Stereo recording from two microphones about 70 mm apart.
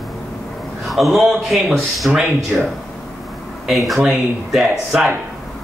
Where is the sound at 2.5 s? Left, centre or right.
Centre.